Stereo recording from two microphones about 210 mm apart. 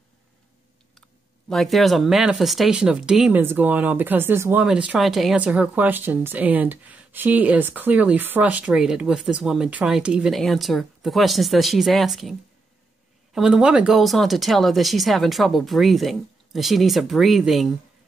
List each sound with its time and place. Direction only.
1.5 s speech: centre (ahead or behind)